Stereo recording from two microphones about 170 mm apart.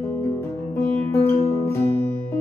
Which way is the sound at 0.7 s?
15° left (ahead or behind).